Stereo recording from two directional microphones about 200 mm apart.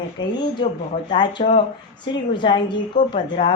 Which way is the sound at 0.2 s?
20° left (ahead or behind).